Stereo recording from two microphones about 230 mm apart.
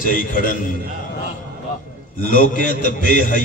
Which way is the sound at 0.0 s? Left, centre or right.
Left.